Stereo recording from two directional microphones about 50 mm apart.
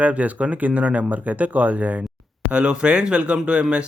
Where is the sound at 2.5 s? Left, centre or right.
Right.